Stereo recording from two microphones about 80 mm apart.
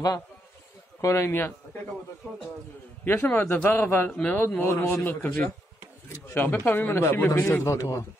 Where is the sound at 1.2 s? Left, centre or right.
Left.